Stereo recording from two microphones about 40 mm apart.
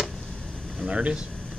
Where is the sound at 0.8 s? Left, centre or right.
Right.